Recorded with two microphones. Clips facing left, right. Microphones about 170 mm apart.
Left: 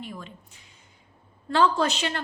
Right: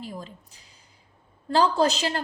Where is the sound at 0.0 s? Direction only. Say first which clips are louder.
Right 2 dB; 35° right (ahead or behind).